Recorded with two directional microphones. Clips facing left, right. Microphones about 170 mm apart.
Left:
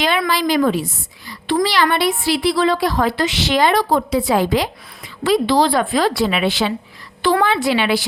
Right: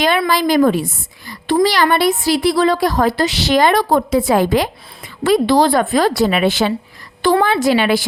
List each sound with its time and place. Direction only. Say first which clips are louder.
0.3 s a woman's voice: right 4 dB; 45° right (ahead or behind)